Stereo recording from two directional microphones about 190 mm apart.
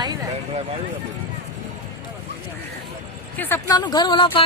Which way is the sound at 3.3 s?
10° left (ahead or behind).